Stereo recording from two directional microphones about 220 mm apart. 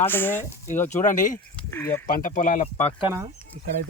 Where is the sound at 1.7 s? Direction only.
10° left (ahead or behind).